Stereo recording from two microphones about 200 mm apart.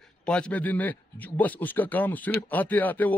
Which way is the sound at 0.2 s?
5° left (ahead or behind).